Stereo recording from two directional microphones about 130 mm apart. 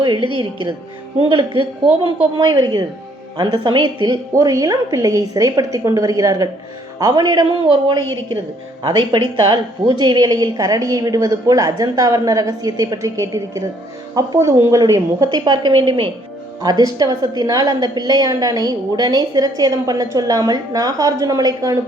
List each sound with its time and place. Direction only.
1.3 s a woman's voice: 40° right (ahead or behind)
16.6 s a woman's voice: 30° right (ahead or behind)